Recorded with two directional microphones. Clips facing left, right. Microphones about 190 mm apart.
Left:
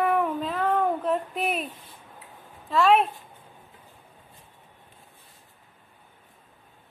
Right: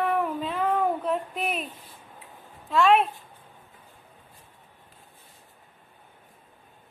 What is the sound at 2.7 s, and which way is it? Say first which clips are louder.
Speech: even; centre (ahead or behind).